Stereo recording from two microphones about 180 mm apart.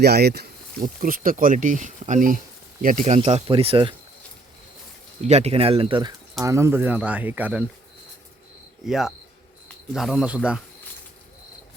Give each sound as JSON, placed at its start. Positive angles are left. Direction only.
{"t": 0.0, "sound": "speech", "side_deg": -65}
{"t": 3.2, "sound": "speech", "side_deg": -30}
{"t": 5.2, "sound": "speech", "side_deg": -35}
{"t": 6.4, "sound": "speech", "side_deg": -15}
{"t": 8.9, "sound": "speech", "side_deg": 0}